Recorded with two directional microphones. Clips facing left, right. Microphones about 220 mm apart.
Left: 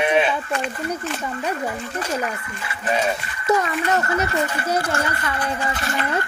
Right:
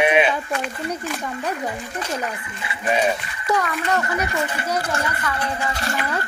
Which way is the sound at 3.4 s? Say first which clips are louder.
Left 2 dB; 25° left (ahead or behind).